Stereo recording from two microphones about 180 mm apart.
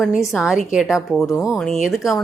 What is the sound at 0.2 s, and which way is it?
A woman's voice, centre (ahead or behind).